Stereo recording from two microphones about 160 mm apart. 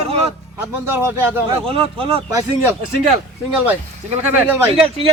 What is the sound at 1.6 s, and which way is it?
Speech, 35° right (ahead or behind).